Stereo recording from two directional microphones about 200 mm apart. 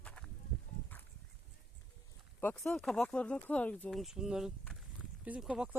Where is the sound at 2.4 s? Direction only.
10° left (ahead or behind).